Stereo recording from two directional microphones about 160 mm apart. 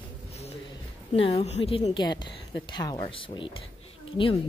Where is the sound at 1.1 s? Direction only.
40° left (ahead or behind).